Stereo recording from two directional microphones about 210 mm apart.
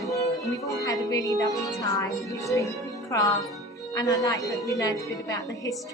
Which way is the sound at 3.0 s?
15° left (ahead or behind).